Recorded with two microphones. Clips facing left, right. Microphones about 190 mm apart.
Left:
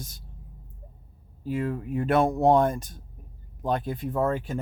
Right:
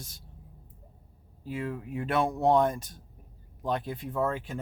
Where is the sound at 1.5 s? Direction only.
45° left (ahead or behind).